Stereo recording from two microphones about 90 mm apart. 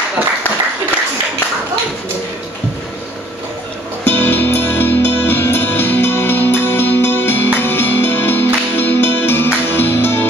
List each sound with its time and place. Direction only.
4.0 s music: 25° left (ahead or behind)